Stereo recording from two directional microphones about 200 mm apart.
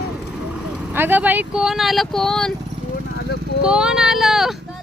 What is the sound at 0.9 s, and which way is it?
Speech, 10° right (ahead or behind).